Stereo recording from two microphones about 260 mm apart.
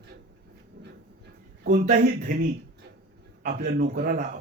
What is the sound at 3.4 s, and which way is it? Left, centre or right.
Speech, right.